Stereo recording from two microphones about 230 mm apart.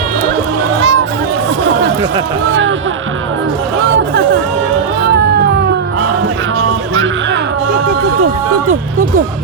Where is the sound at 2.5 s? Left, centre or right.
Right.